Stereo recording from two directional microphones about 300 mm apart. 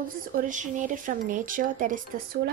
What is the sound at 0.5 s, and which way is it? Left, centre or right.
Speech, right.